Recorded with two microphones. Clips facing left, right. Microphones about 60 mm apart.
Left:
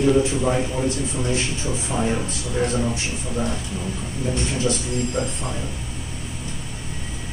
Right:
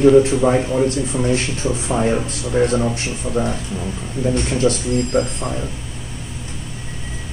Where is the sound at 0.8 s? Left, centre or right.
Right.